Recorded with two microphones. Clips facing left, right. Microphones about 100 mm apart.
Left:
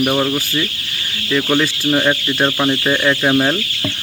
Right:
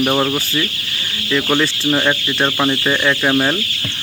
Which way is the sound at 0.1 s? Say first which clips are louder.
Even; 15° right (ahead or behind).